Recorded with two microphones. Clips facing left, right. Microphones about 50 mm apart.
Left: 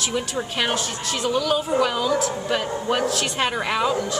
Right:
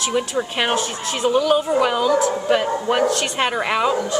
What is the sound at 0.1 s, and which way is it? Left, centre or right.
Speech, centre.